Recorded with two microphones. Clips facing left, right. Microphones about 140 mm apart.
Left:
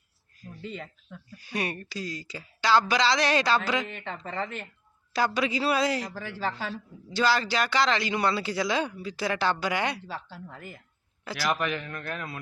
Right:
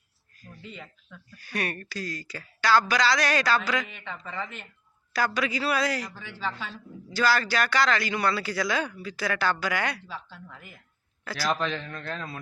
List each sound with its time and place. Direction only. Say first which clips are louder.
0.7 s speech: left 3 dB; 45° left (ahead or behind)
1.4 s speech: even; 20° left (ahead or behind)
3.9 s speech: left 3 dB; 40° left (ahead or behind)
5.1 s speech: left 1 dB; 25° left (ahead or behind)
6.2 s a woman's voice: left 2 dB; 40° left (ahead or behind)
7.1 s speech: even; 25° left (ahead or behind)
10.2 s a woman's voice: left 4 dB; 40° left (ahead or behind)
11.3 s a man's voice: even; 15° left (ahead or behind)